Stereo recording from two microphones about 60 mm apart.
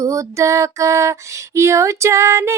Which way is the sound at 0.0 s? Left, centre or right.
Right.